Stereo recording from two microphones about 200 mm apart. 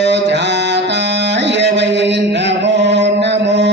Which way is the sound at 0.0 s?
60° right (ahead or behind).